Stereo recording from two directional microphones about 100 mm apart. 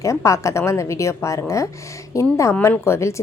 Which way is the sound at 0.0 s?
30° left (ahead or behind).